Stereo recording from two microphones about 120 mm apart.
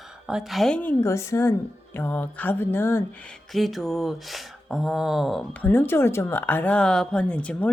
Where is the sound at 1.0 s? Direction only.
25° left (ahead or behind).